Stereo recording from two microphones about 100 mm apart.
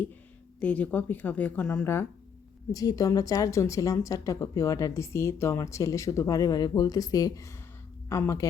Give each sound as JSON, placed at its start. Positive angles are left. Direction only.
{"t": 0.6, "sound": "speech", "side_deg": 15}
{"t": 2.7, "sound": "a woman's voice", "side_deg": 35}